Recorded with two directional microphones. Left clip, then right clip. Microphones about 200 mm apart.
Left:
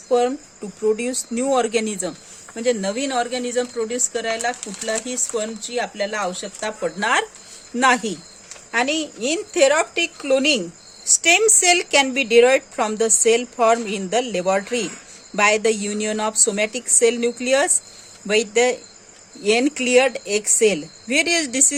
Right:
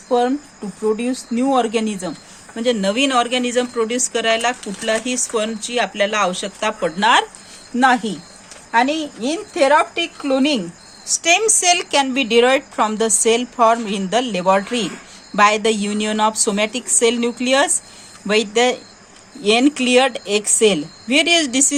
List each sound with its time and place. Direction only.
0.1 s a woman's voice: 30° left (ahead or behind)